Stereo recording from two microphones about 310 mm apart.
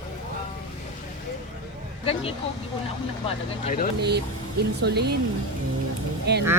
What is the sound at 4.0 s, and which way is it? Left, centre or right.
Speech, right.